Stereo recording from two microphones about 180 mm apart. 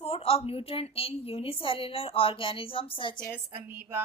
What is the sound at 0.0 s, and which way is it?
A woman's voice, 35° left (ahead or behind).